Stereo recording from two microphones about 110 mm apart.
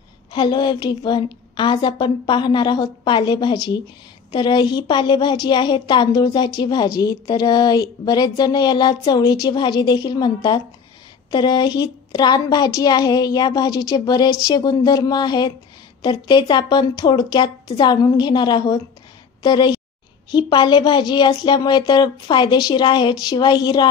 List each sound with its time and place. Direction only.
0.3 s a woman's voice: 45° left (ahead or behind)